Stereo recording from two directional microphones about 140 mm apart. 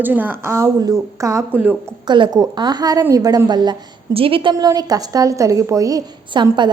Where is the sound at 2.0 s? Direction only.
35° right (ahead or behind).